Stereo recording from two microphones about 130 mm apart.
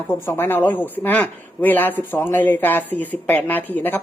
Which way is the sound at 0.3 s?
15° left (ahead or behind).